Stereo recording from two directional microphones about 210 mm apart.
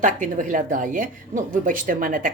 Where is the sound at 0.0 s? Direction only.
40° right (ahead or behind).